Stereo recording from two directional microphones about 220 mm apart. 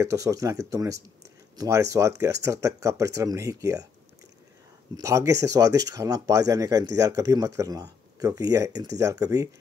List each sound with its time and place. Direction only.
0.0 s speech: 15° right (ahead or behind)
4.9 s speech: 15° right (ahead or behind)